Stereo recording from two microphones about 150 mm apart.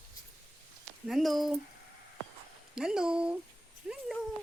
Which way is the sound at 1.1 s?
Centre (ahead or behind).